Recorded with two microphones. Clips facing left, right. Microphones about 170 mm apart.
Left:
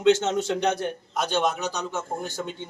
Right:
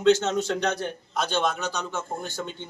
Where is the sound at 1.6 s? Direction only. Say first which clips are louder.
Left 1 dB; 40° left (ahead or behind).